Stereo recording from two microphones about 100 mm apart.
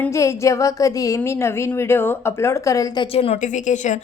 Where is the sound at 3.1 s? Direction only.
80° left.